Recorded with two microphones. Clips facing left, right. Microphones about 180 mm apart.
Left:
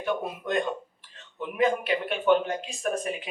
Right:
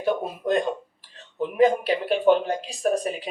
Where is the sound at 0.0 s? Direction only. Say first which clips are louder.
Right 5 dB; 35° right (ahead or behind).